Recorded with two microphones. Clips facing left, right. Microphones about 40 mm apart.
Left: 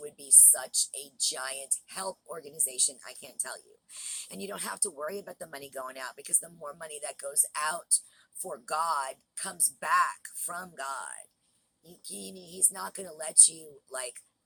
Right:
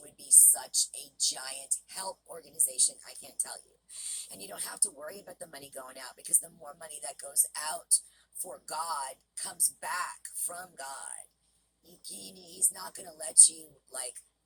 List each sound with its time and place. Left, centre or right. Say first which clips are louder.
0.2 s a woman's voice: left 1 dB; centre
2.2 s speech: left 5 dB; left
2.7 s speech: even; left
3.1 s speech: left 5 dB; left
5.0 s speech: left 8 dB; left
6.3 s speech: left 3 dB; left
9.3 s a woman's voice: left 4 dB; left
9.8 s speech: left 10 dB; left
12.0 s a woman's voice: left 6 dB; left
13.9 s speech: left 6 dB; left